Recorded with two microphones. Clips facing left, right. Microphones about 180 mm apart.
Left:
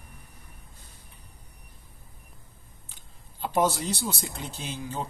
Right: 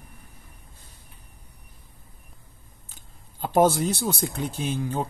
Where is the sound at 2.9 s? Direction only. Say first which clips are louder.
Right 1 dB; 45° right (ahead or behind).